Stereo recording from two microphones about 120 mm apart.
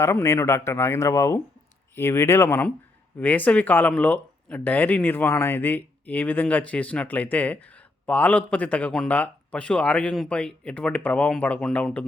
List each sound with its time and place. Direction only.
0.0 s speech: 25° left (ahead or behind)